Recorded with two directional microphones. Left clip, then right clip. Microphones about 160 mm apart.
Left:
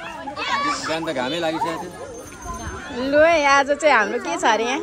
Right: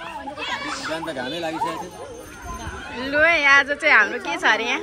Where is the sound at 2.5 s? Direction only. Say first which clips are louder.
Left 2 dB; 35° right (ahead or behind).